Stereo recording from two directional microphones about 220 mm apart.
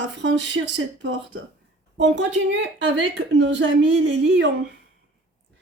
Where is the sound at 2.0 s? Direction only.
55° right (ahead or behind).